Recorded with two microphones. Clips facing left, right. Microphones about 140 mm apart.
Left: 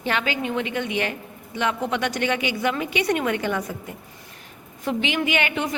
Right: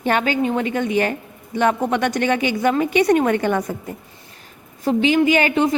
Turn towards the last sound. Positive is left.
turn(degrees=-35)  # may be behind; listen again after turning